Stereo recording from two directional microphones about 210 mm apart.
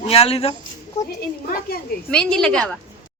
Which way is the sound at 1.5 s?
45° left (ahead or behind).